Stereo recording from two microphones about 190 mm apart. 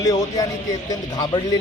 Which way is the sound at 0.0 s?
20° left (ahead or behind).